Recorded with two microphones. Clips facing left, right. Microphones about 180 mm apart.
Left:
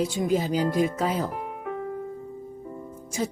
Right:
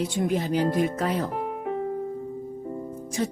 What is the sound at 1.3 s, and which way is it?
Music, 30° right (ahead or behind).